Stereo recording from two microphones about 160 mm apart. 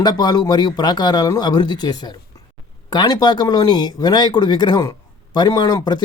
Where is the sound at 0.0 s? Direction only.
25° left (ahead or behind).